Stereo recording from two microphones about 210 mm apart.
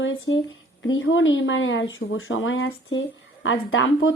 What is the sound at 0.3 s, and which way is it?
Speech, 65° left (ahead or behind).